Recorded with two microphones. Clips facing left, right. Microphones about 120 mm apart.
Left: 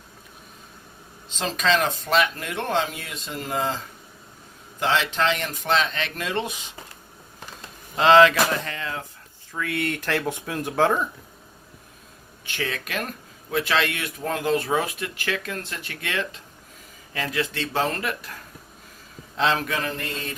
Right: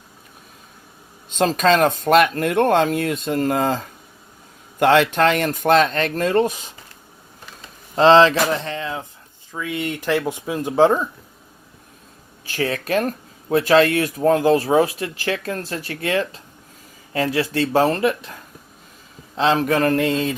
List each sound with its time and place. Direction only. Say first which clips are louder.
1.3 s speech: right 7 dB; 50° right (ahead or behind)
7.9 s speech: right 3 dB; 30° right (ahead or behind)
12.5 s speech: right 8 dB; 35° right (ahead or behind)
19.4 s speech: right 5 dB; 30° right (ahead or behind)
19.7 s mantra: right 11 dB; 60° right (ahead or behind); by 20.2 s 90° right